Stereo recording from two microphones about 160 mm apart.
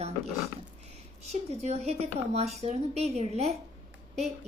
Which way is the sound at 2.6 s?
40° right (ahead or behind).